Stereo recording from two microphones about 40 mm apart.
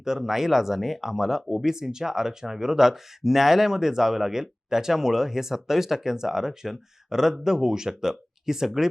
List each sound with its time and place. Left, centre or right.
0.0 s speech: centre